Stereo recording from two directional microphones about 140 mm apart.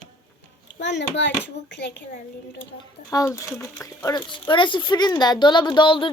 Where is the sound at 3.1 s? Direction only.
25° left (ahead or behind).